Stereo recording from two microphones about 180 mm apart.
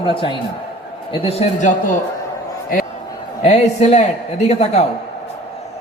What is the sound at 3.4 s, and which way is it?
A man's voice, 35° left (ahead or behind).